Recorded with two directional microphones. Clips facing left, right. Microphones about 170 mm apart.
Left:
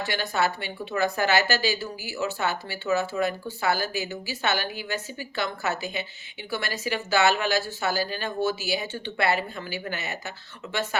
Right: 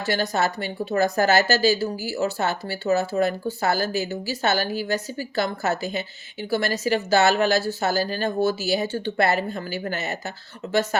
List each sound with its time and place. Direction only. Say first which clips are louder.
0.0 s speech: right 3 dB; 40° right (ahead or behind)